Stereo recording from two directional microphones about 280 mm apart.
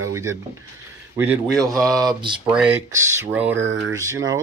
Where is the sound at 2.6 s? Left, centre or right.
Centre.